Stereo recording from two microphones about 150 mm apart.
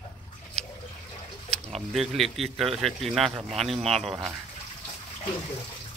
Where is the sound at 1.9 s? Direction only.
Centre (ahead or behind).